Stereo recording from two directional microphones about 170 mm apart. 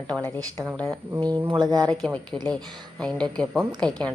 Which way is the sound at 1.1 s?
20° right (ahead or behind).